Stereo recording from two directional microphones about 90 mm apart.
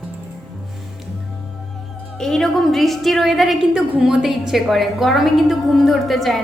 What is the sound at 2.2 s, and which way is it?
A woman's voice, 5° left (ahead or behind).